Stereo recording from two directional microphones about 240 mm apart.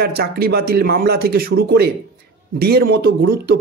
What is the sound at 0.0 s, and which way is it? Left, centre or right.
A man's voice, right.